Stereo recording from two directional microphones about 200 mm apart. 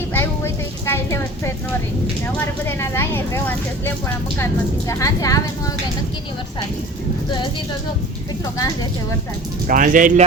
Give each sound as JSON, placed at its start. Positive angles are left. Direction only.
{"t": 0.1, "sound": "vehicle", "side_deg": 10}
{"t": 2.2, "sound": "speech", "side_deg": 10}
{"t": 8.5, "sound": "speech", "side_deg": 15}
{"t": 9.6, "sound": "speech", "side_deg": -45}